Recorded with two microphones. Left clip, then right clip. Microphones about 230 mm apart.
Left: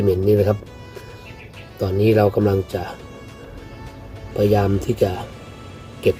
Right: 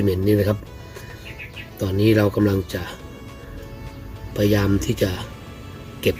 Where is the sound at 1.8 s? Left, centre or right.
Left.